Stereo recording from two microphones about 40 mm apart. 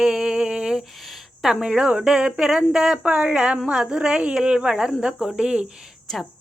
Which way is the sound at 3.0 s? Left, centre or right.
Right.